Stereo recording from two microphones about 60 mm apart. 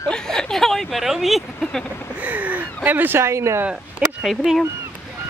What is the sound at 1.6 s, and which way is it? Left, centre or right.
Speech, centre.